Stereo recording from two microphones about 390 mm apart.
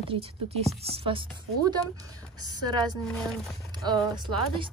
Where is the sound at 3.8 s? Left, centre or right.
Centre.